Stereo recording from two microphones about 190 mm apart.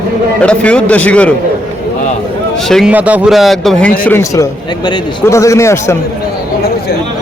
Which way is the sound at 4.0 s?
10° left (ahead or behind).